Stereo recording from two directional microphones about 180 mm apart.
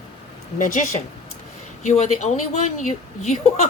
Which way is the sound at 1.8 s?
40° left (ahead or behind).